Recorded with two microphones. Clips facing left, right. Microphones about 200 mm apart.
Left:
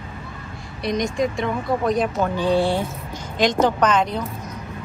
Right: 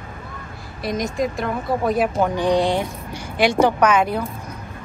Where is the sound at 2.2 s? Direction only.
15° right (ahead or behind).